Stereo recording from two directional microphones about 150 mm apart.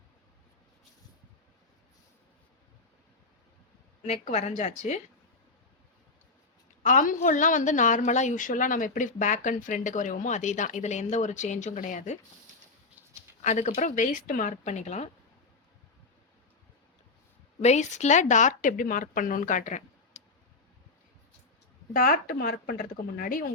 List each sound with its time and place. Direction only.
4.0 s a woman's voice: 50° left (ahead or behind)
6.8 s a woman's voice: 60° left (ahead or behind)
13.4 s a woman's voice: 55° left (ahead or behind)
17.6 s a woman's voice: 50° left (ahead or behind)
21.9 s speech: 70° left (ahead or behind)